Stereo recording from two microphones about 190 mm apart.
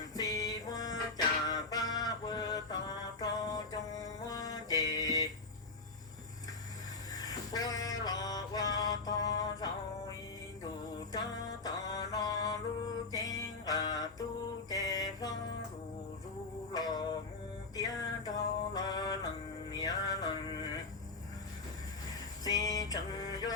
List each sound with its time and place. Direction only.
0.1 s music: 20° left (ahead or behind)
3.2 s mantra: 20° left (ahead or behind)
7.1 s music: 20° left (ahead or behind)
8.7 s mantra: 20° left (ahead or behind)
11.1 s mantra: 20° left (ahead or behind)
13.1 s music: 20° left (ahead or behind)
14.7 s mantra: 20° left (ahead or behind)
16.7 s a sound: 20° left (ahead or behind)
17.7 s music: 20° left (ahead or behind)
22.4 s music: 20° left (ahead or behind)